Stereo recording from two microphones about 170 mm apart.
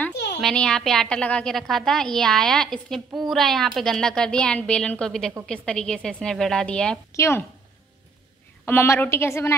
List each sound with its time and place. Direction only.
0.4 s a woman's voice: 5° left (ahead or behind)
8.6 s a woman's voice: 15° left (ahead or behind)